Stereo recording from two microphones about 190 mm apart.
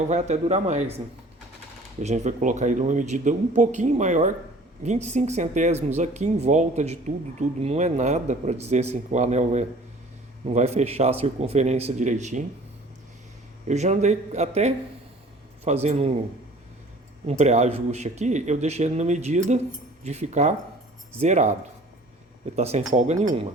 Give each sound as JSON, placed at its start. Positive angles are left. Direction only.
{"t": 0.1, "sound": "speech", "side_deg": -35}
{"t": 13.7, "sound": "speech", "side_deg": -35}
{"t": 17.2, "sound": "speech", "side_deg": -35}
{"t": 22.5, "sound": "speech", "side_deg": -35}